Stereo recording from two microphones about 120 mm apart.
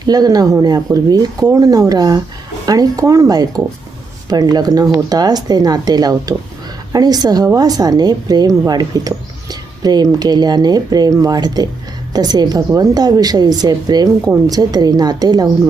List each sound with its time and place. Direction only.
0.0 s a woman's voice: 35° right (ahead or behind)